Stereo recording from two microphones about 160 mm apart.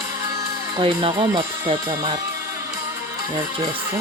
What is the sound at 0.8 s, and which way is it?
Speech, 35° right (ahead or behind).